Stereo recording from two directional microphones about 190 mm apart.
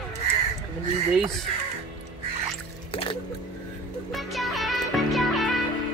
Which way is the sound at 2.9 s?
30° left (ahead or behind).